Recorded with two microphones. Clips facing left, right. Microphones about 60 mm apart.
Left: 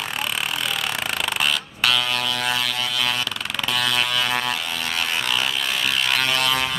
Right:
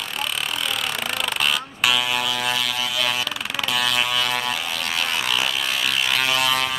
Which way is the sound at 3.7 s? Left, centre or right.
Centre.